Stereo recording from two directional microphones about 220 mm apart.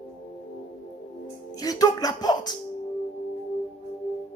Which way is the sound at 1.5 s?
15° left (ahead or behind).